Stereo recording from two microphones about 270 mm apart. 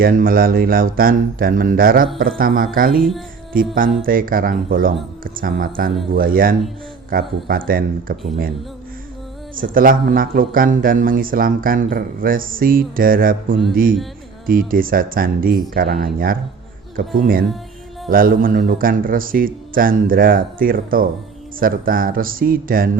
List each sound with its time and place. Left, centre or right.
0.0 s speech: right
9.7 s speech: right